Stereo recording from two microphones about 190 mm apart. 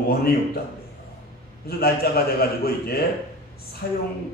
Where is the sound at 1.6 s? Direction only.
55° left (ahead or behind).